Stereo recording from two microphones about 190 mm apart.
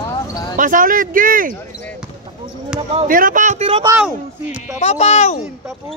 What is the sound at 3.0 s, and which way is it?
Speech, 45° right (ahead or behind).